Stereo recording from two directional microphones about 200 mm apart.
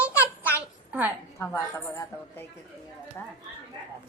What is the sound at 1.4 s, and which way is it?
A woman's voice, 15° left (ahead or behind).